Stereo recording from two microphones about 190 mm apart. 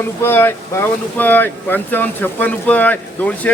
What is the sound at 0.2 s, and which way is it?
Speech, 10° left (ahead or behind).